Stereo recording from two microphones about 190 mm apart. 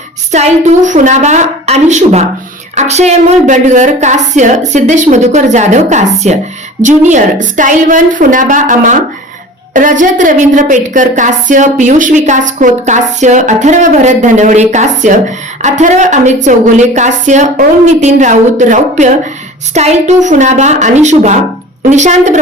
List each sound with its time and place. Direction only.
0.3 s a woman's voice: 35° right (ahead or behind)